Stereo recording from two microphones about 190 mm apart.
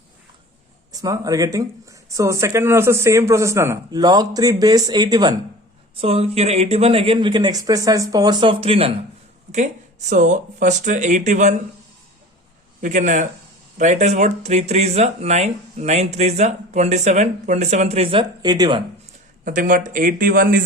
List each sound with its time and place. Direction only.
0.9 s speech: 20° right (ahead or behind)
6.0 s speech: 30° right (ahead or behind)
12.8 s speech: 40° right (ahead or behind); by 18.8 s 20° right (ahead or behind)
19.5 s speech: 45° right (ahead or behind)